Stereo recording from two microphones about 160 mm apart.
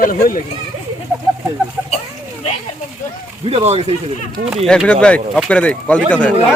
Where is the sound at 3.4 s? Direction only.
40° right (ahead or behind).